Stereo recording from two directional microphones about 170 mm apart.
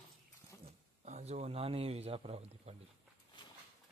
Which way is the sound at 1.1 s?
45° right (ahead or behind).